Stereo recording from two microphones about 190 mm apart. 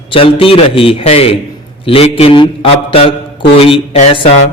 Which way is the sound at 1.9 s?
30° left (ahead or behind).